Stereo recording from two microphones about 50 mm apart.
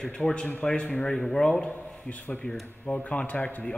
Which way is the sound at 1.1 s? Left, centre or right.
Centre.